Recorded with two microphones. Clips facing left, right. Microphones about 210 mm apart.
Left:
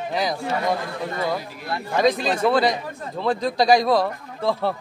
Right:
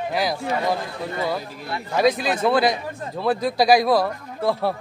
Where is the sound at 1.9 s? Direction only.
5° right (ahead or behind).